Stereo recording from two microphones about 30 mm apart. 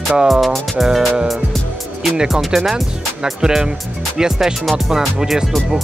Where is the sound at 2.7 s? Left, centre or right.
Right.